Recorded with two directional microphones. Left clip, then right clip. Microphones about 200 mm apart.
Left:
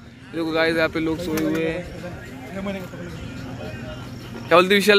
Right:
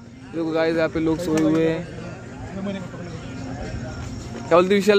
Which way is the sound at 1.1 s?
25° right (ahead or behind).